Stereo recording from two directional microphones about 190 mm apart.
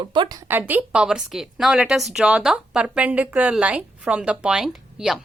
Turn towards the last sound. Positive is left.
turn(degrees=-5)  # may be behind; listen again after turning